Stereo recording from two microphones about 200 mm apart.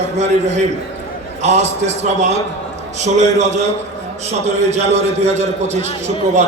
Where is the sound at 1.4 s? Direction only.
35° right (ahead or behind).